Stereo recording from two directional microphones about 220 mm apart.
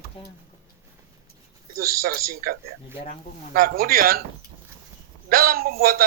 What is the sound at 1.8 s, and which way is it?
A man's voice, 45° right (ahead or behind).